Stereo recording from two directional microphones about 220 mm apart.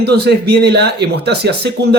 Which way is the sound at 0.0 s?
50° right (ahead or behind).